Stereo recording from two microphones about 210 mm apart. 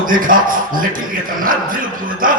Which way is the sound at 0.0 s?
40° right (ahead or behind).